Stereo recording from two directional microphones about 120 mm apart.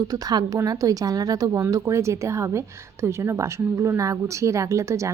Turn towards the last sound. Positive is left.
turn(degrees=-25)  # may be behind; listen again after turning